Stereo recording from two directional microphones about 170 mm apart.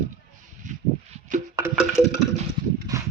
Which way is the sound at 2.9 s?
20° right (ahead or behind).